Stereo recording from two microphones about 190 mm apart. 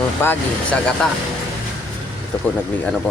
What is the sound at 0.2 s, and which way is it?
Speech, 10° left (ahead or behind).